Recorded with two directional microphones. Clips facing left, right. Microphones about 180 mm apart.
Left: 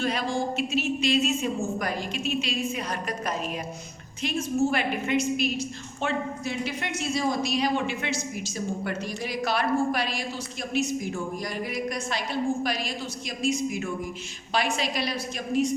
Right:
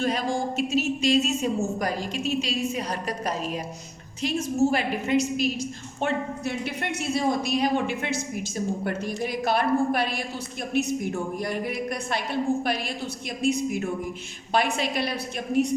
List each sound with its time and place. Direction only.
0.0 s speech: 45° right (ahead or behind)
6.4 s a woman's voice: 60° right (ahead or behind)
11.4 s a woman's voice: 55° right (ahead or behind)